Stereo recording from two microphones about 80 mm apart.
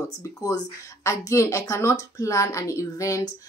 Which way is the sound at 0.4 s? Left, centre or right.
Left.